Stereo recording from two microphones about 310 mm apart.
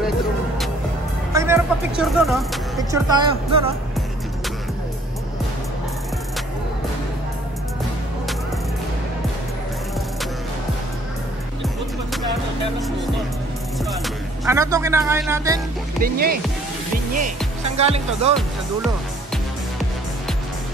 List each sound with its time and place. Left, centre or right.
1.3 s speech: centre
2.8 s speech: centre
14.0 s speech: centre
16.0 s speech: right
17.7 s speech: centre